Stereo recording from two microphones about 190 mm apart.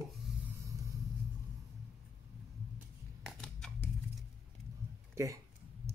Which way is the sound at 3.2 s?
5° left (ahead or behind).